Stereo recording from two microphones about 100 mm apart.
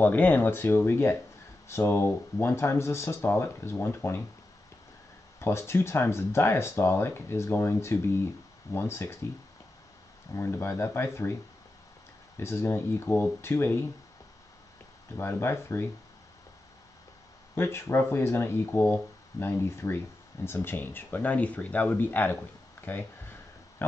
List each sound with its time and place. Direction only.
0.0 s speech: 20° left (ahead or behind)
5.4 s speech: 25° left (ahead or behind)
10.3 s speech: 25° left (ahead or behind)
12.4 s speech: 25° left (ahead or behind)
15.1 s speech: 25° left (ahead or behind)
17.6 s speech: 25° left (ahead or behind)